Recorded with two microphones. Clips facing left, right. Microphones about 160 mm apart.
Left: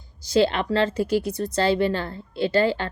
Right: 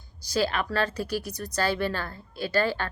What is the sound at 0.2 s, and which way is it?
A woman's voice, 25° left (ahead or behind).